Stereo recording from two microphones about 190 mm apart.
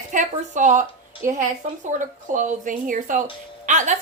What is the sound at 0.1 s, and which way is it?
A woman's voice, 40° right (ahead or behind).